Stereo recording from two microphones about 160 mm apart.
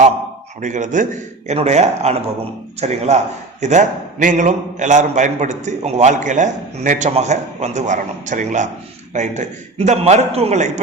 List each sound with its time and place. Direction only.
0.6 s a man's voice: 50° right (ahead or behind)